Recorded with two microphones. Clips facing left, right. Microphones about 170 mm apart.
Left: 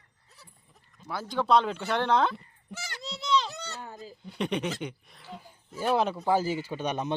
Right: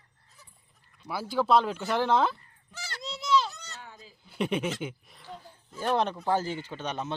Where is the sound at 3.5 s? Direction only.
70° left (ahead or behind).